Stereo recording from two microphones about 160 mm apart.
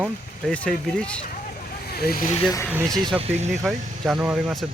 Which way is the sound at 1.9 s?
70° left (ahead or behind).